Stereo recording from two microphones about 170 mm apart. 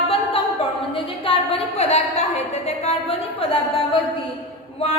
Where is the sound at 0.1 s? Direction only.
35° left (ahead or behind).